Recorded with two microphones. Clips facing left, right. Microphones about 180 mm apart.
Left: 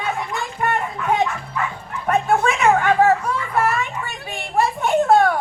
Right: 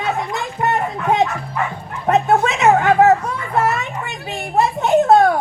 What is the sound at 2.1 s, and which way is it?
Dog, 20° right (ahead or behind).